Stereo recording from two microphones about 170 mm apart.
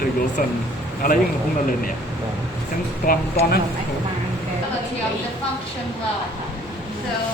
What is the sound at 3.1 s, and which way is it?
Speech, 55° left (ahead or behind).